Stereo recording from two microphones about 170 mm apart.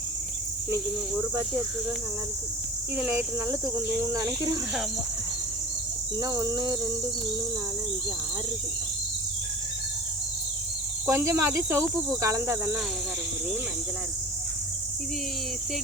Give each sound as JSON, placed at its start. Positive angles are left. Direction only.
{"t": 2.9, "sound": "insect", "side_deg": -10}
{"t": 3.9, "sound": "cricket", "side_deg": -20}
{"t": 6.1, "sound": "cricket", "side_deg": -20}
{"t": 11.0, "sound": "insect", "side_deg": -15}